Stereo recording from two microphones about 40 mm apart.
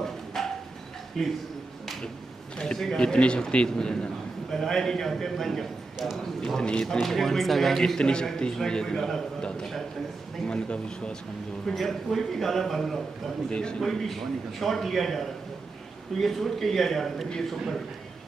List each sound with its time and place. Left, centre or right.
0.0 s a sound: centre
1.2 s a man's voice: centre
2.6 s a man's voice: centre
8.0 s a man's voice: left
11.7 s a man's voice: centre
13.5 s speech: left
13.7 s a man's voice: centre